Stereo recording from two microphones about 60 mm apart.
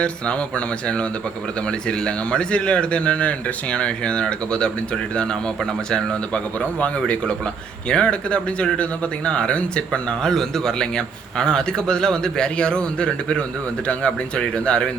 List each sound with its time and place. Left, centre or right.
0.0 s a man's voice: centre